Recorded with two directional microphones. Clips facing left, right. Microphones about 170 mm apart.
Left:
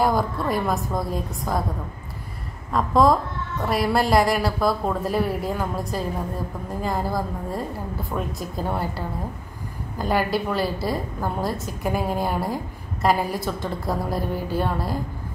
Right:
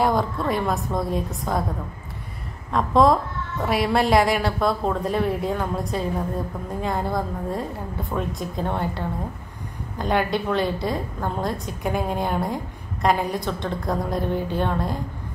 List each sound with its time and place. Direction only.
0.0 s a woman's voice: 5° left (ahead or behind)
2.7 s a woman's voice: centre (ahead or behind)